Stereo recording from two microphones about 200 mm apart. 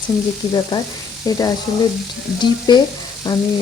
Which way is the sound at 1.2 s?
15° left (ahead or behind).